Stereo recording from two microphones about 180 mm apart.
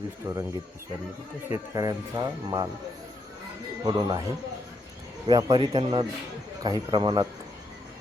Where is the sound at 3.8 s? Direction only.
20° right (ahead or behind).